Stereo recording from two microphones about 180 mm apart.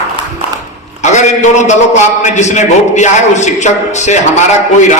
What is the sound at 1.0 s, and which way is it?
A man's voice, 40° left (ahead or behind).